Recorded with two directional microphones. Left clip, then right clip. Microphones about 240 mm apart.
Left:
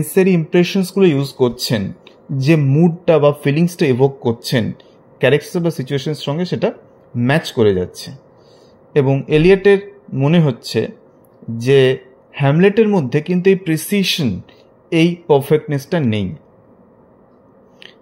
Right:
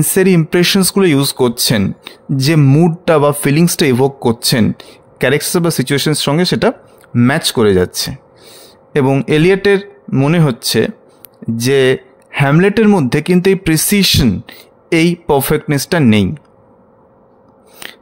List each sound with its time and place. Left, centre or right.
0.1 s speech: right